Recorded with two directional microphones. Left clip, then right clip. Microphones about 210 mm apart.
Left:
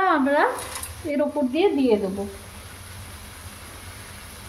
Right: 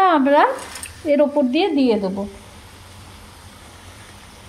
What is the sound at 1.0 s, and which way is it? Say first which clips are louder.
Stir: right 8 dB; 40° right (ahead or behind).